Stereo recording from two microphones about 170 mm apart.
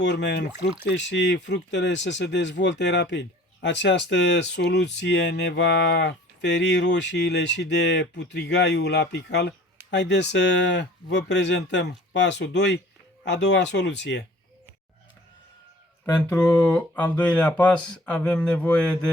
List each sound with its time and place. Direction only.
0.0 s speech: 90° left
16.0 s speech: 20° left (ahead or behind)
16.4 s speech: 5° left (ahead or behind)